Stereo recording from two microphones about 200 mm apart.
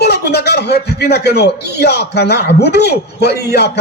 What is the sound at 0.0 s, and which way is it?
A man's voice, 55° left (ahead or behind).